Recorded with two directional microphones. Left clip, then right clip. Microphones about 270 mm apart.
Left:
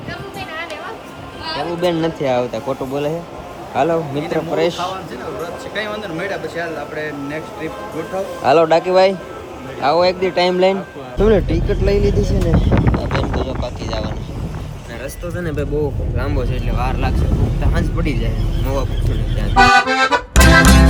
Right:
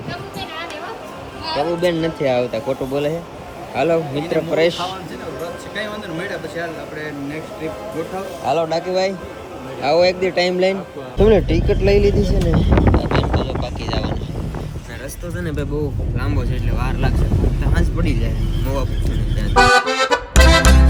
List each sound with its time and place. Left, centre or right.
1.5 s speech: centre
8.4 s a man's voice: left
9.8 s speech: centre
15.4 s speech: centre
19.4 s accordion: centre